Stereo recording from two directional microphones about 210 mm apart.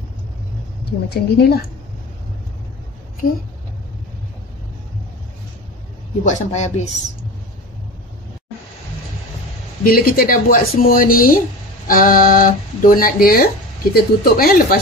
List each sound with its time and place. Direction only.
1.1 s speech: 50° left (ahead or behind)
3.2 s speech: 45° left (ahead or behind)
6.2 s speech: 35° left (ahead or behind)
9.8 s speech: 45° left (ahead or behind)